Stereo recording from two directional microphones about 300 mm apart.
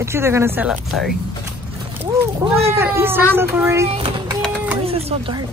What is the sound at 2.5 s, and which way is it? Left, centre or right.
Speech, centre.